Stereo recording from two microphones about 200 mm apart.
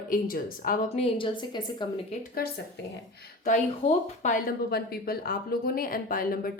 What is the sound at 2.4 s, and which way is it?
Speech, 50° left (ahead or behind).